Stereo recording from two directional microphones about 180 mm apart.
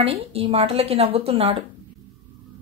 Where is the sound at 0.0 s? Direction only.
35° right (ahead or behind).